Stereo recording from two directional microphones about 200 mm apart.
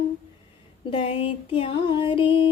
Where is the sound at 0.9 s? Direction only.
25° left (ahead or behind).